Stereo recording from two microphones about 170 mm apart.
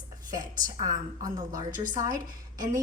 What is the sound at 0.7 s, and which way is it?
Speech, 20° right (ahead or behind).